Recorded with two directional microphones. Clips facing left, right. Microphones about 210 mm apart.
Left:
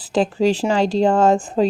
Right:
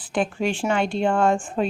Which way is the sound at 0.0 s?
35° left (ahead or behind).